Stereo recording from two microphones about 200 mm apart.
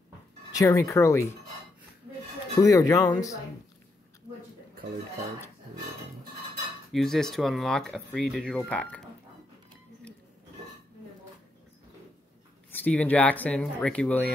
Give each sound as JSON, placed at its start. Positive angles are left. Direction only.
{"t": 0.5, "sound": "speech", "side_deg": 15}
{"t": 2.6, "sound": "speech", "side_deg": 15}
{"t": 6.9, "sound": "speech", "side_deg": 0}
{"t": 12.7, "sound": "speech", "side_deg": 5}